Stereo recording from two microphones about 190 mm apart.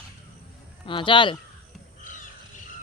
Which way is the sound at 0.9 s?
25° left (ahead or behind).